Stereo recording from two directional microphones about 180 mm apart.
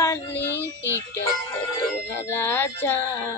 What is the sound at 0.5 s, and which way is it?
Speech, 15° right (ahead or behind).